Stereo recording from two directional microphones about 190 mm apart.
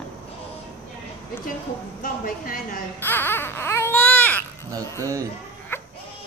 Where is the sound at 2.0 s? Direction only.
50° left (ahead or behind).